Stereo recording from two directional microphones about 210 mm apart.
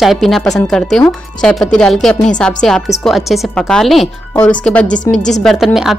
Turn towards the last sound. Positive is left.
turn(degrees=0)  # may be behind; listen again after turning